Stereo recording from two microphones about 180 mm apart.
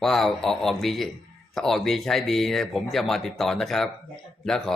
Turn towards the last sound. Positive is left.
turn(degrees=0)  # may be behind; listen again after turning